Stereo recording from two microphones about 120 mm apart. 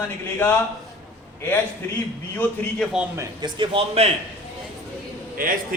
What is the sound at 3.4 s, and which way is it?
Speech, 45° right (ahead or behind).